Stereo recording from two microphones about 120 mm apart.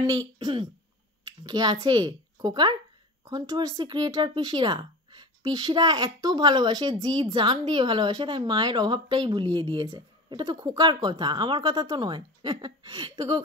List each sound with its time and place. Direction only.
1.4 s a woman's voice: 35° right (ahead or behind)